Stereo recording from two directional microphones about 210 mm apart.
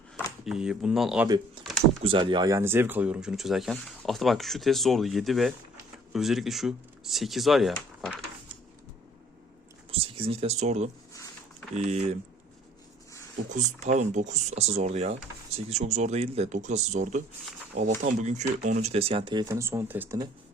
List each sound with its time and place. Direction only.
0.4 s speech: 5° right (ahead or behind)
2.0 s speech: 25° right (ahead or behind); by 8.2 s centre (ahead or behind)
9.9 s speech: 25° right (ahead or behind)
13.5 s speech: 35° right (ahead or behind); by 20.2 s 10° right (ahead or behind)